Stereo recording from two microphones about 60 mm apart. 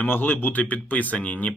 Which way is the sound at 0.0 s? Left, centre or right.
Left.